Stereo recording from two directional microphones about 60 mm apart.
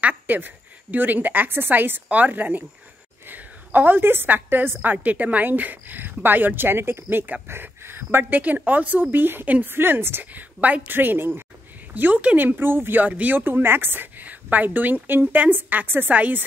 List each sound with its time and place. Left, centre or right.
0.0 s a sound: right
0.9 s a woman's voice: right
11.9 s speech: right